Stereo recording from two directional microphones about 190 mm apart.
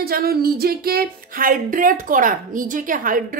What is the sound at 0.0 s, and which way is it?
Speech, 55° right (ahead or behind).